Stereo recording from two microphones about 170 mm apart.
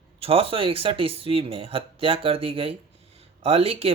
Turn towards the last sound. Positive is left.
turn(degrees=-35)  # may be behind; listen again after turning